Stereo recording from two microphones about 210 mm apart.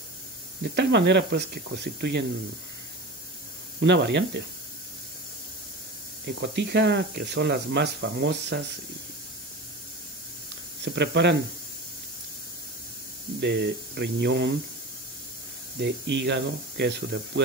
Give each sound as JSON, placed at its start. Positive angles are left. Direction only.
{"t": 0.7, "sound": "speech", "side_deg": -55}
{"t": 3.8, "sound": "speech", "side_deg": -55}
{"t": 6.2, "sound": "speech", "side_deg": -55}
{"t": 10.8, "sound": "speech", "side_deg": -55}
{"t": 13.4, "sound": "speech", "side_deg": -50}
{"t": 15.8, "sound": "speech", "side_deg": -55}